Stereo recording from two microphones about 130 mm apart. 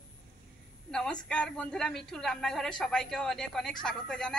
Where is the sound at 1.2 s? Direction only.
5° left (ahead or behind).